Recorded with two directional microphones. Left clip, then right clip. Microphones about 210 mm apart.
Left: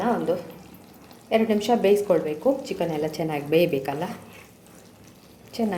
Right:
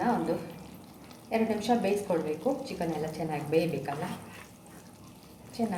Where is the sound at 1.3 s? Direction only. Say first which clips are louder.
Left 7 dB; 40° left (ahead or behind).